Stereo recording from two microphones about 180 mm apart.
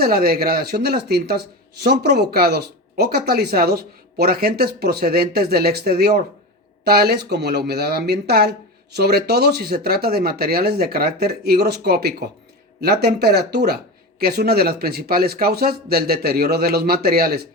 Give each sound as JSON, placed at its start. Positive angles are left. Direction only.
{"t": 0.0, "sound": "speech", "side_deg": -55}